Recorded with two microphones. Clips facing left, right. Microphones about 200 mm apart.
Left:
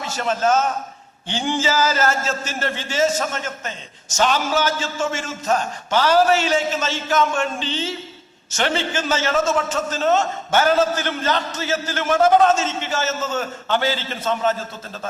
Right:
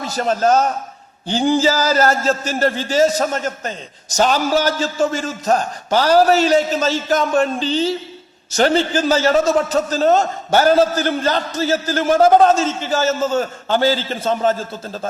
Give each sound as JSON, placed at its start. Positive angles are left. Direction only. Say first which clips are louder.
{"t": 0.0, "sound": "a man's voice", "louder": "right 4 dB", "side_deg": -35}